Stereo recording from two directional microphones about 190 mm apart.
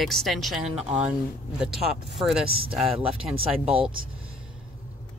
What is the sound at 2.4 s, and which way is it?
Speech, 55° right (ahead or behind).